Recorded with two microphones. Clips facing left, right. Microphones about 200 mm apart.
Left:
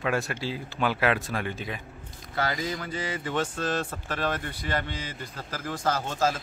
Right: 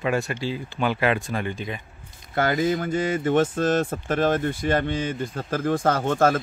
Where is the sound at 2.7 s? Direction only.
50° right (ahead or behind).